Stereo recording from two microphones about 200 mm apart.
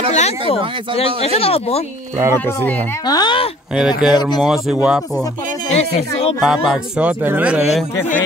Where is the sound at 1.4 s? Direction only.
30° left (ahead or behind).